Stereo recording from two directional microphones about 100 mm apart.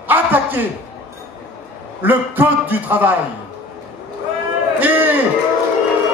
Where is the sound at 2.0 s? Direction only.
20° right (ahead or behind).